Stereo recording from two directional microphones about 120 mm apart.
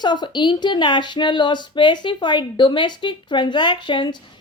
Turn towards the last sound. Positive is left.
turn(degrees=40)  # may be behind; listen again after turning